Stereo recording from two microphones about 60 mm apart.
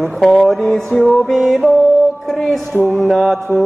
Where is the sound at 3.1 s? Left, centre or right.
Centre.